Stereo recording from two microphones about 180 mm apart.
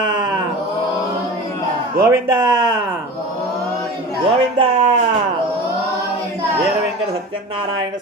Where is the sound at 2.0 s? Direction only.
20° right (ahead or behind).